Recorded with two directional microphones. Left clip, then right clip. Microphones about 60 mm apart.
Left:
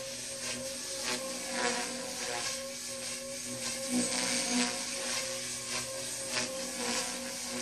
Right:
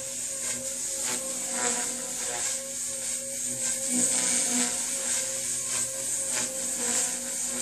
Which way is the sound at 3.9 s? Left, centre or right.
Right.